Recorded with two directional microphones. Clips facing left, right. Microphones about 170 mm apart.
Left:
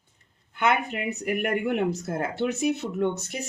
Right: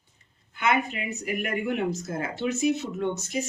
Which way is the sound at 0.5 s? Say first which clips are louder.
Left 1 dB; 60° left (ahead or behind).